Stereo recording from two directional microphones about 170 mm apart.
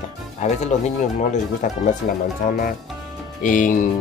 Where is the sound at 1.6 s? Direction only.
45° left (ahead or behind).